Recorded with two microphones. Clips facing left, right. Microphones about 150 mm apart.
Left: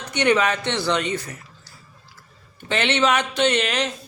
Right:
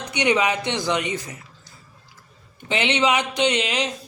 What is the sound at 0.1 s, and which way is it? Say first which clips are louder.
A man's voice: left 1 dB; 15° right (ahead or behind).